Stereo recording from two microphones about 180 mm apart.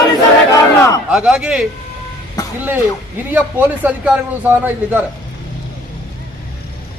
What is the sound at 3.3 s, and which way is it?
A man's voice, 10° right (ahead or behind).